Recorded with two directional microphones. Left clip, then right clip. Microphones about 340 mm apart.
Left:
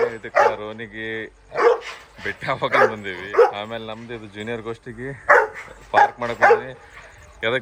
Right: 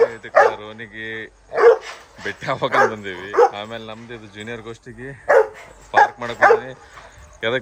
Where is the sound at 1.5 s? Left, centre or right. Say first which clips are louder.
Right 4 dB; right.